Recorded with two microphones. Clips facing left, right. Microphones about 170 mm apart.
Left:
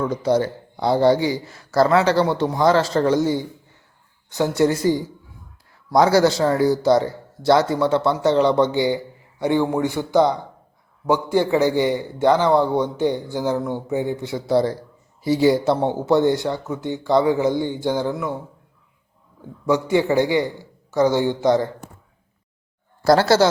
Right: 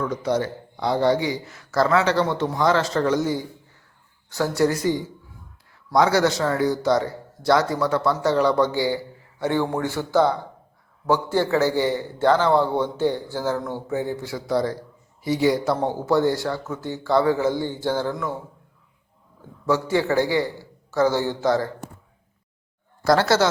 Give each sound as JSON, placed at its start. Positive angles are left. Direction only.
{"t": 0.0, "sound": "a man's voice", "side_deg": 30}
{"t": 19.6, "sound": "a man's voice", "side_deg": 15}
{"t": 23.0, "sound": "a man's voice", "side_deg": 30}